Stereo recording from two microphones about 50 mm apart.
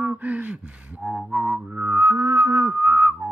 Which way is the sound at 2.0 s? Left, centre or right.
Right.